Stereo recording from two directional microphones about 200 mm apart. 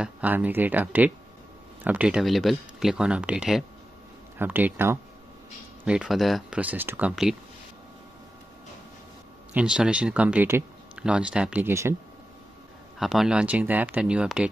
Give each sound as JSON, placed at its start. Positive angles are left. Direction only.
{"t": 0.0, "sound": "speech", "side_deg": -5}
{"t": 9.5, "sound": "speech", "side_deg": -5}
{"t": 13.0, "sound": "speech", "side_deg": 0}